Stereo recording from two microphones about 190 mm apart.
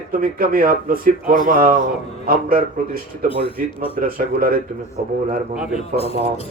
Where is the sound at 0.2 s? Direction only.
50° right (ahead or behind).